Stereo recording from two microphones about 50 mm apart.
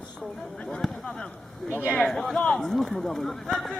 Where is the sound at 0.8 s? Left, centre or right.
Centre.